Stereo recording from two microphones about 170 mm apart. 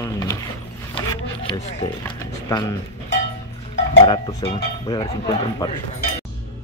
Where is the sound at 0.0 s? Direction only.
15° left (ahead or behind).